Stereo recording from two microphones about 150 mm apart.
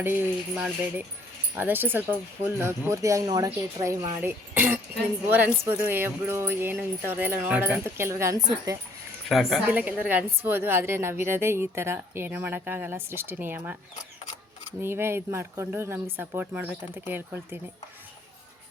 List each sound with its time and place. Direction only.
0.0 s a woman's voice: 15° right (ahead or behind)
9.3 s a woman's voice: centre (ahead or behind)
14.8 s a woman's voice: 15° right (ahead or behind)